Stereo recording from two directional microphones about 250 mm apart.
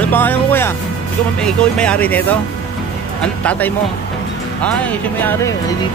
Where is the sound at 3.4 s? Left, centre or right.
Centre.